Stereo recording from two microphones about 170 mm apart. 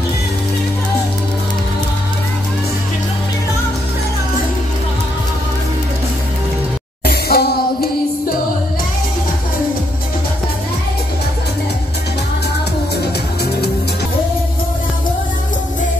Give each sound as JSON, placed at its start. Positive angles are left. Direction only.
{"t": 7.1, "sound": "music", "side_deg": 65}